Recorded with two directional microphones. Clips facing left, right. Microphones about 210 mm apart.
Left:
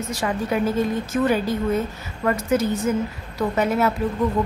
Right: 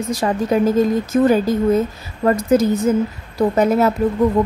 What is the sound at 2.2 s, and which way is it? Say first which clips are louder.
A woman's voice: right 6 dB; 30° right (ahead or behind).